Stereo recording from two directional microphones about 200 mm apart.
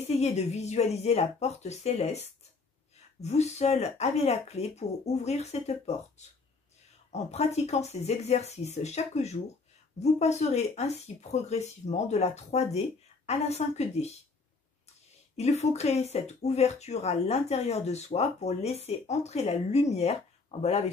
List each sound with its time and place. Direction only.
0.0 s speech: 35° left (ahead or behind)
15.3 s speech: 35° left (ahead or behind)